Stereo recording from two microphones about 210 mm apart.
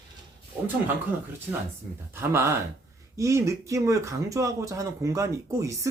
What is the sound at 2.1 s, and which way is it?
Speech, 10° right (ahead or behind).